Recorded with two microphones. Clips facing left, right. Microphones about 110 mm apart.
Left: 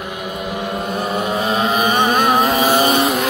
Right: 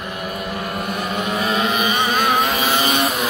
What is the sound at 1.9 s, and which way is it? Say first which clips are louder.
Vehicle: left 4 dB; 50° left (ahead or behind).